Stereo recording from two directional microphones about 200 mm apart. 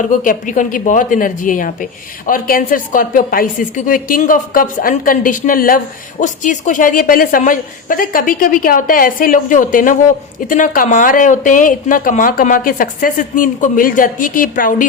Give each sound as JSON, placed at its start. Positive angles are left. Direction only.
{"t": 0.1, "sound": "speech", "side_deg": 40}